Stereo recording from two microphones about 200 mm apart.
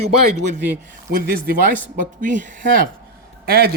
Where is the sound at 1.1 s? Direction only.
45° right (ahead or behind).